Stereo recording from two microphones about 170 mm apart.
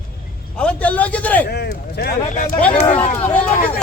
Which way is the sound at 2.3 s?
50° left (ahead or behind).